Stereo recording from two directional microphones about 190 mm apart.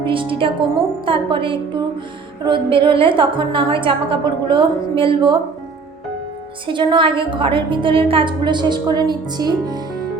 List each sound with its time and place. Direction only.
0.0 s a woman's voice: 25° right (ahead or behind)
6.7 s a woman's voice: 25° right (ahead or behind)